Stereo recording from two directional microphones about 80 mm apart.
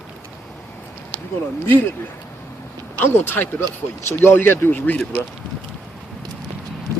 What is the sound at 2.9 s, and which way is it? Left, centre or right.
Speech, left.